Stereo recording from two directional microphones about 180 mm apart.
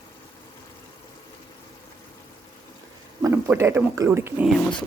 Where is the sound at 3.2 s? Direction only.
15° right (ahead or behind).